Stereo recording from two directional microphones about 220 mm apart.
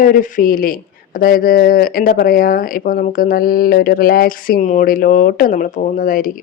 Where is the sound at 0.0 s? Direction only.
35° left (ahead or behind).